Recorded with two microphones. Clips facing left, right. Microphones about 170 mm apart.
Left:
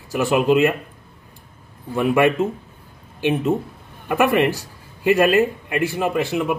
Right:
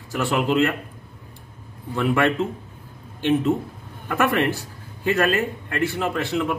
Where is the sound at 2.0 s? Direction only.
15° left (ahead or behind).